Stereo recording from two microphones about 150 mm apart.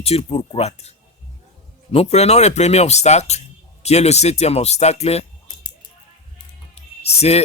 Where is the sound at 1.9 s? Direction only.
45° left (ahead or behind).